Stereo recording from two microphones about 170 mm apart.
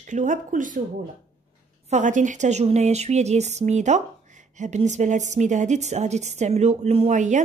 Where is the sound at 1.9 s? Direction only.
45° right (ahead or behind).